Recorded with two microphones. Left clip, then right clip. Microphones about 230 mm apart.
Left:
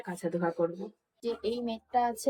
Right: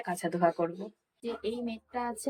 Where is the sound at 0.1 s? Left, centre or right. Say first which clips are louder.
Right 2 dB; centre.